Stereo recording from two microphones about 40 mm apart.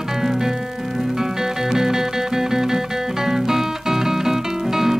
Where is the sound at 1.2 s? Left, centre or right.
Centre.